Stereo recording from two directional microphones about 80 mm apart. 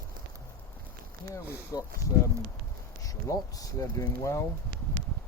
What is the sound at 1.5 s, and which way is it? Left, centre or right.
Speech, left.